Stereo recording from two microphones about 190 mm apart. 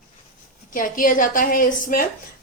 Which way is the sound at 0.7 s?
45° left (ahead or behind).